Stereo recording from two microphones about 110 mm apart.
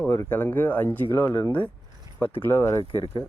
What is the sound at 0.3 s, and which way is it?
Speech, 15° left (ahead or behind).